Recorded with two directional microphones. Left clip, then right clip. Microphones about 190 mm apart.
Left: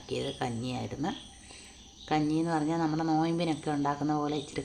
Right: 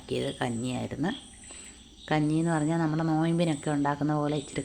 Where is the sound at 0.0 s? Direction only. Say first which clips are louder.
Right 3 dB; 15° right (ahead or behind).